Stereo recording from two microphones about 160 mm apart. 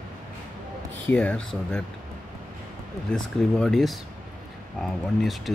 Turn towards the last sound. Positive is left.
turn(degrees=0)  # may be behind; listen again after turning